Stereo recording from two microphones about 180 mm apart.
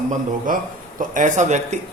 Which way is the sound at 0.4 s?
50° right (ahead or behind).